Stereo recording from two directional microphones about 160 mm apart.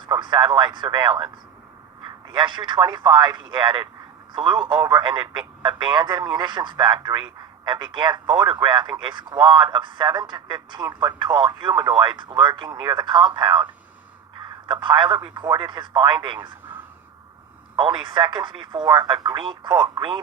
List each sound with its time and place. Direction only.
0.0 s speech: 30° right (ahead or behind)
2.3 s speech: 25° right (ahead or behind)
14.7 s speech: 30° right (ahead or behind)
17.7 s speech: 30° right (ahead or behind)